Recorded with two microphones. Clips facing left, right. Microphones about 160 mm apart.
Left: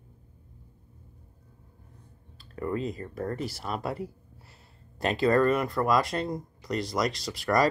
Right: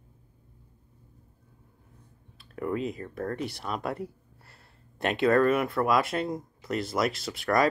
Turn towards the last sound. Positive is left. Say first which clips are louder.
# even
turn(degrees=0)  # may be behind; listen again after turning